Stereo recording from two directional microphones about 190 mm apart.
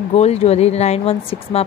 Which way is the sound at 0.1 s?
35° left (ahead or behind).